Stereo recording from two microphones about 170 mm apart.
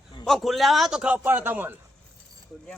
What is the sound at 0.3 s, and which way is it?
A man's voice, centre (ahead or behind).